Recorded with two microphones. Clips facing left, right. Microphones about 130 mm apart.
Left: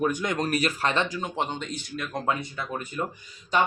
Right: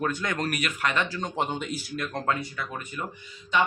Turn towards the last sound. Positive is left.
turn(degrees=40)  # may be behind; listen again after turning